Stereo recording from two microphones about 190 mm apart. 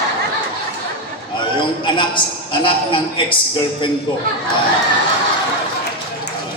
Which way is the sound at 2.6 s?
25° left (ahead or behind).